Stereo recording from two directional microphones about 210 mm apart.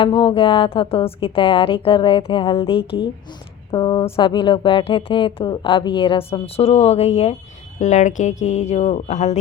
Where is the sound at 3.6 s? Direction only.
20° left (ahead or behind).